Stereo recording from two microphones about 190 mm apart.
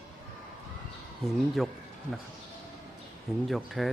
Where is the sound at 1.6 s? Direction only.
Centre (ahead or behind).